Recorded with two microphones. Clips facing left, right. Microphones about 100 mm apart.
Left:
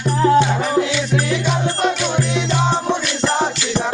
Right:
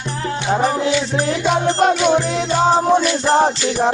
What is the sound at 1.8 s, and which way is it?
Music, 40° right (ahead or behind).